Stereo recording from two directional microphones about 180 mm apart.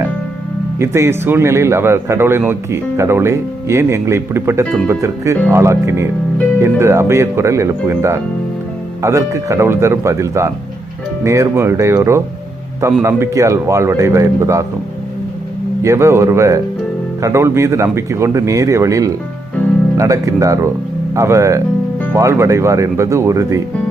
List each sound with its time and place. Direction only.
0.8 s speech: 15° right (ahead or behind)
15.8 s speech: 15° right (ahead or behind)